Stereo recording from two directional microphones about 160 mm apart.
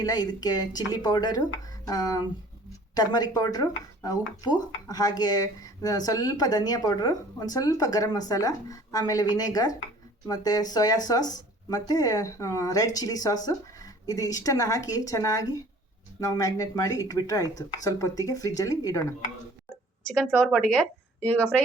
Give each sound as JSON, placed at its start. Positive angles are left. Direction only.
{"t": 0.0, "sound": "speech", "side_deg": 25}
{"t": 20.1, "sound": "speech", "side_deg": 5}